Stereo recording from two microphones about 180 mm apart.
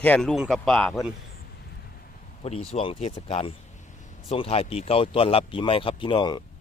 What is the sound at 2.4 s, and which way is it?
Speech, 35° left (ahead or behind).